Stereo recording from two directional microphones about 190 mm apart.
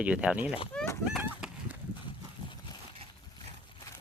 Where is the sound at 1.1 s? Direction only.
5° right (ahead or behind).